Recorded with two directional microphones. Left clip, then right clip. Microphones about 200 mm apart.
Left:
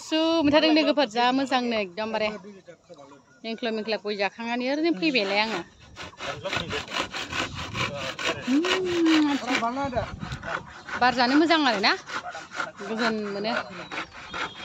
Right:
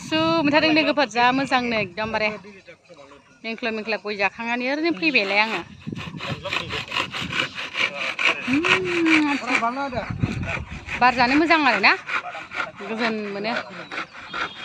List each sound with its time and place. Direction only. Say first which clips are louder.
0.1 s a woman's voice: right 2 dB; 5° right (ahead or behind)
3.4 s a woman's voice: right 3 dB; centre (ahead or behind)
6.2 s sawing: right 2 dB; 35° left (ahead or behind)
9.4 s speech: right 4 dB; 20° left (ahead or behind)
9.7 s a sound: right 2 dB; 10° right (ahead or behind)
11.0 s a woman's voice: right 3 dB; 5° right (ahead or behind)
12.1 s sawing: right 6 dB; 35° right (ahead or behind)
13.5 s rub: right 2 dB; 40° right (ahead or behind)